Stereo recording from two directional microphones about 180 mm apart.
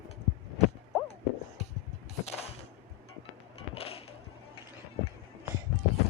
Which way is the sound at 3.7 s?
30° left (ahead or behind).